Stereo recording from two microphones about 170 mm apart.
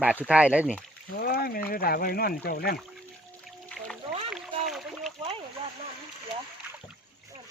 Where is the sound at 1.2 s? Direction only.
65° left (ahead or behind).